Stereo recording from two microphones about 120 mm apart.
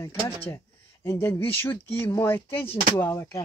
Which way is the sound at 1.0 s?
20° left (ahead or behind).